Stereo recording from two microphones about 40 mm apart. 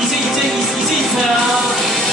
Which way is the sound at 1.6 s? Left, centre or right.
Centre.